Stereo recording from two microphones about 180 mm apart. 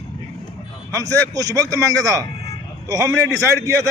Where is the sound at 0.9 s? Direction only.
20° right (ahead or behind).